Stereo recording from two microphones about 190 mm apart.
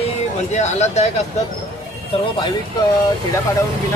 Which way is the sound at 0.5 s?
35° left (ahead or behind).